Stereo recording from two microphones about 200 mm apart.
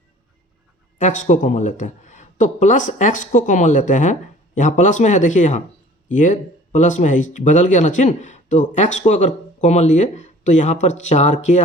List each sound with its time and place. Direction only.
0.9 s speech: 40° left (ahead or behind)